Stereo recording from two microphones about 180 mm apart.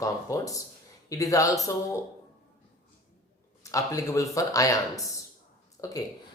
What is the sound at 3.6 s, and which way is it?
Speech, 20° left (ahead or behind).